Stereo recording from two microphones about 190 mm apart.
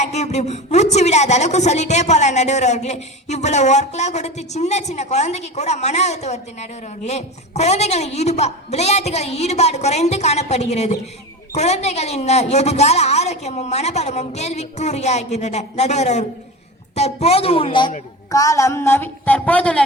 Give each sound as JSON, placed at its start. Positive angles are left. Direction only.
{"t": 0.0, "sound": "a woman's voice", "side_deg": 35}